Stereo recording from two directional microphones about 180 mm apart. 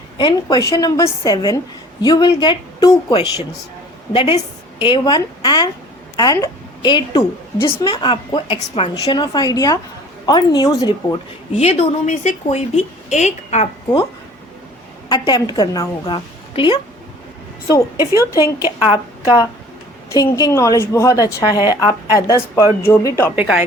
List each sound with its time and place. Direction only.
0.2 s a woman's voice: 25° left (ahead or behind)
11.5 s a woman's voice: 35° left (ahead or behind)
15.1 s a woman's voice: 25° left (ahead or behind)
20.1 s a woman's voice: 20° left (ahead or behind)
23.3 s a woman's voice: 5° right (ahead or behind)